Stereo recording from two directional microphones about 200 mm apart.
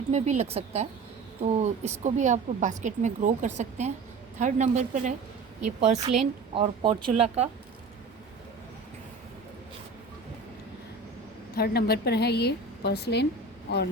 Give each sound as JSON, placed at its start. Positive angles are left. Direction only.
{"t": 0.1, "sound": "speech", "side_deg": -35}
{"t": 11.5, "sound": "a woman's voice", "side_deg": 50}